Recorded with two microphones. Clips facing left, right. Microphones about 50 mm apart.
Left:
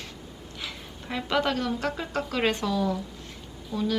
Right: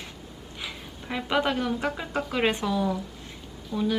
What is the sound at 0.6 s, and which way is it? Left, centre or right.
A woman's voice, centre.